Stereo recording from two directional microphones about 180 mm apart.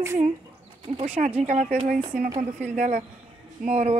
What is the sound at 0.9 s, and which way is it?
Speech, 35° right (ahead or behind).